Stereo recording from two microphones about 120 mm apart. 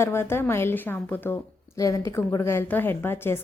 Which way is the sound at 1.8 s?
25° left (ahead or behind).